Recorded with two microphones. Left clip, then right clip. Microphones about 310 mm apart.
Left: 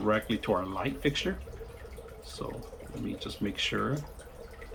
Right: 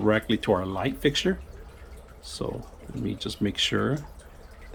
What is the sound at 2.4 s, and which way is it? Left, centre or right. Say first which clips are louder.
Speech: right 6 dB; right.